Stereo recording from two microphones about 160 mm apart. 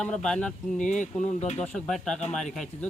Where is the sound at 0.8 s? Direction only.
50° left (ahead or behind).